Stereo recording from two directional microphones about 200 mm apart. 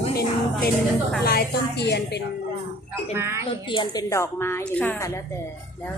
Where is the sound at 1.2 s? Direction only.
50° left (ahead or behind).